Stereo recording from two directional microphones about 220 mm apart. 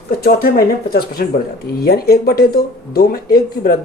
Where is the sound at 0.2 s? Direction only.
45° left (ahead or behind).